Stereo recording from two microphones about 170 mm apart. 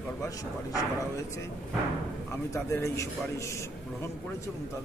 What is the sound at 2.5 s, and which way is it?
A man's voice, 15° left (ahead or behind).